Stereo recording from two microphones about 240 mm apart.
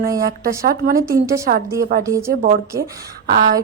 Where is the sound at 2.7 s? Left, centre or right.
Right.